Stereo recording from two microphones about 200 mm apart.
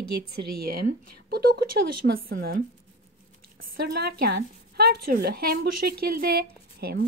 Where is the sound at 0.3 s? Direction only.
50° right (ahead or behind).